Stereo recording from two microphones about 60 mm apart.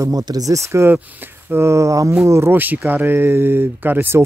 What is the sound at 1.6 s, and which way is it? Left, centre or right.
Speech, right.